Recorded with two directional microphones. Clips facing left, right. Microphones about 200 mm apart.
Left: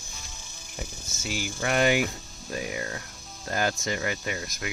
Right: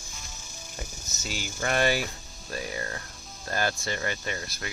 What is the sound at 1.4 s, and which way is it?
Cricket, 10° left (ahead or behind).